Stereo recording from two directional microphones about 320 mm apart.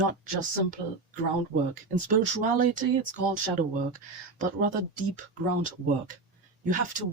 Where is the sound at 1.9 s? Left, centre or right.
Right.